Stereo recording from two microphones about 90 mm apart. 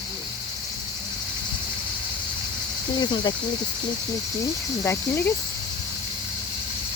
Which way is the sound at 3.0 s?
60° left (ahead or behind).